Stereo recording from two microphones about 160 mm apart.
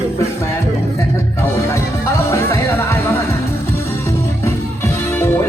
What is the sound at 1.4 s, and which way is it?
Music, 15° left (ahead or behind).